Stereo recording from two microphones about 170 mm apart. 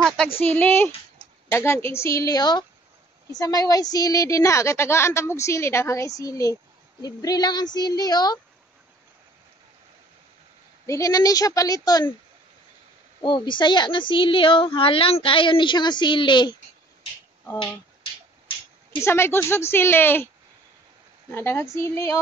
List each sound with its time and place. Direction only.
0.5 s a woman's voice: 10° left (ahead or behind)
10.9 s a woman's voice: 20° left (ahead or behind)
13.2 s a woman's voice: 30° left (ahead or behind)
18.9 s a woman's voice: 15° left (ahead or behind)
21.3 s a woman's voice: 15° left (ahead or behind)